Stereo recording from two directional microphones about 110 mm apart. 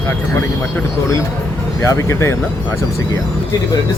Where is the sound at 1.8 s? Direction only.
25° left (ahead or behind).